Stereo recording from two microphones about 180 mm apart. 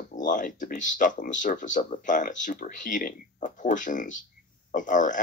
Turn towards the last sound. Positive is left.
turn(degrees=45)  # may be behind; listen again after turning